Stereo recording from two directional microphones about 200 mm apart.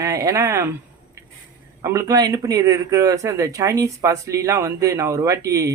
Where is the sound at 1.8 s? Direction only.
15° right (ahead or behind).